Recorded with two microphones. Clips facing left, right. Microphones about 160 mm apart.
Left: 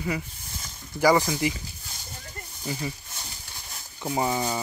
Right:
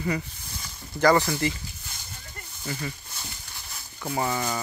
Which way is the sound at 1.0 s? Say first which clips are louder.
Even; 10° left (ahead or behind).